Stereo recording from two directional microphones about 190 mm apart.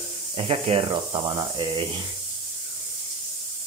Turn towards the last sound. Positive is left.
turn(degrees=-25)  # may be behind; listen again after turning